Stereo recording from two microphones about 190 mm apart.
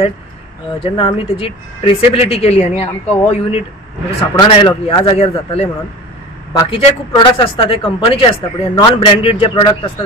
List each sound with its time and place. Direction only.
0.7 s a man's voice: 30° left (ahead or behind)
6.7 s a man's voice: 25° left (ahead or behind)